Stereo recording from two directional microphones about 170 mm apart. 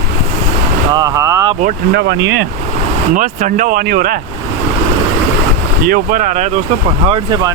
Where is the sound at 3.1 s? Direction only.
50° right (ahead or behind).